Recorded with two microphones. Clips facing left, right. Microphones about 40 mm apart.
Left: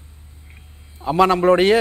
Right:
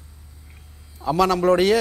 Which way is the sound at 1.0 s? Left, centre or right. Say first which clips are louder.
Left 3 dB; left.